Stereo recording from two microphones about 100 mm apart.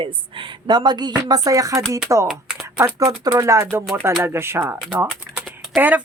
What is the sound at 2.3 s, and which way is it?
Typing, centre (ahead or behind).